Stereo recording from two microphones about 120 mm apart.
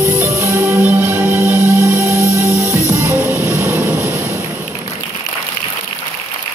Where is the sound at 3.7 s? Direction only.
25° left (ahead or behind).